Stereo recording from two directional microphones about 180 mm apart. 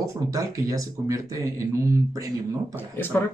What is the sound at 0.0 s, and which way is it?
Speech, 20° right (ahead or behind).